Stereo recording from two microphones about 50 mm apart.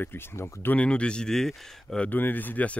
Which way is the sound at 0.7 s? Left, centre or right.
Left.